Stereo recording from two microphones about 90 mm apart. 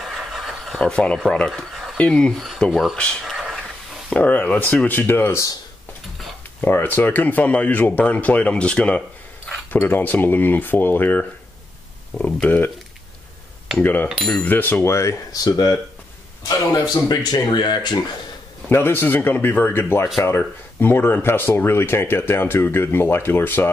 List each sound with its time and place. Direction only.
0.0 s a sound: centre (ahead or behind)
2.0 s speech: 10° left (ahead or behind)
3.3 s a sound: centre (ahead or behind)
4.1 s speech: 15° left (ahead or behind)
6.6 s speech: 20° left (ahead or behind)
13.7 s speech: 20° left (ahead or behind); by 17.9 s 55° left (ahead or behind)
18.7 s speech: 25° left (ahead or behind)